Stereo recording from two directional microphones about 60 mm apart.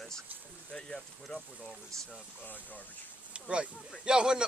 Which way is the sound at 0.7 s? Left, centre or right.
Centre.